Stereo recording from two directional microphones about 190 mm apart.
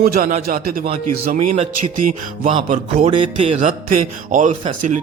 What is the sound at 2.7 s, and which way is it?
Speech, 40° right (ahead or behind).